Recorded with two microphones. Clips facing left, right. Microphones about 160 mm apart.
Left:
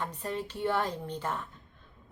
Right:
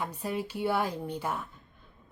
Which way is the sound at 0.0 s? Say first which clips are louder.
Right 2 dB; 10° right (ahead or behind).